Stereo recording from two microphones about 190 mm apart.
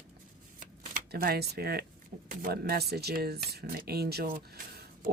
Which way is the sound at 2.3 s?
50° right (ahead or behind).